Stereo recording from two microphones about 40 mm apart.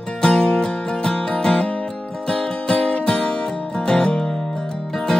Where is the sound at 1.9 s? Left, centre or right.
Centre.